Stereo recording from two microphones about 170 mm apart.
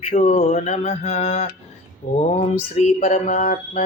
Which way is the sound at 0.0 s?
45° left (ahead or behind).